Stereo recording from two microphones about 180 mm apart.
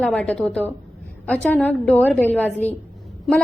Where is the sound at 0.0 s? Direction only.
5° left (ahead or behind).